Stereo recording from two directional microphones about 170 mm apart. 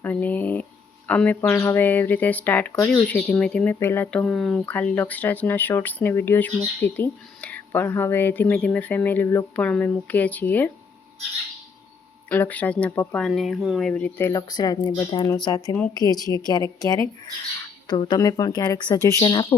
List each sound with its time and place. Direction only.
0.0 s speech: 10° left (ahead or behind)
12.3 s speech: 10° left (ahead or behind)
13.9 s speech: 15° left (ahead or behind)